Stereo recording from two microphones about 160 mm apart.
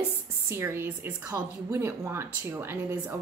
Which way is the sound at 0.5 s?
15° right (ahead or behind).